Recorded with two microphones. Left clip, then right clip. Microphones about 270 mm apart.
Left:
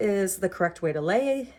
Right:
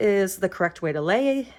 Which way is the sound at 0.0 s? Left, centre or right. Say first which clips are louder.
Right 4 dB; centre.